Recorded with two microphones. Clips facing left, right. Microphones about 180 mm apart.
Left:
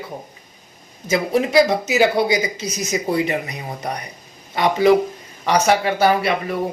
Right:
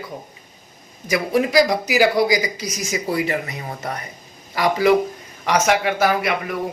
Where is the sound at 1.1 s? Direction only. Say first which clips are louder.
Left 1 dB; 25° left (ahead or behind).